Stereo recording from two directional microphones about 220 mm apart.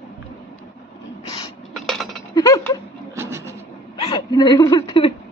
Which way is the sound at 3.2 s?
10° right (ahead or behind).